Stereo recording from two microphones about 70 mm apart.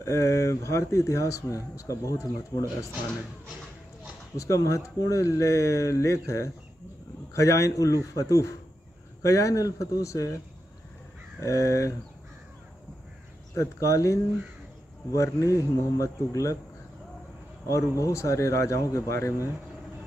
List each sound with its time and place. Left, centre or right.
0.0 s speech: left
4.4 s speech: left
11.4 s speech: left
13.6 s speech: left
17.6 s speech: left